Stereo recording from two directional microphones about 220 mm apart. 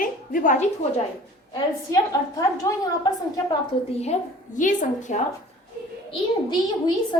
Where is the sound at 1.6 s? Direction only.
15° left (ahead or behind).